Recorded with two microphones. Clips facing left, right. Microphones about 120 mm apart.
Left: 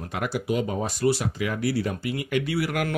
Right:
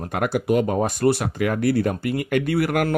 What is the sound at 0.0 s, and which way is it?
Speech, 50° right (ahead or behind).